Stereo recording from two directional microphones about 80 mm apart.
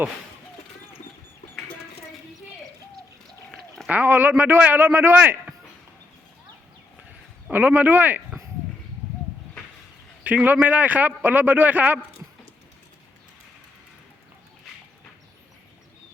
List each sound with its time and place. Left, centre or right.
3.8 s a man's voice: right
7.4 s a man's voice: right
10.2 s a man's voice: right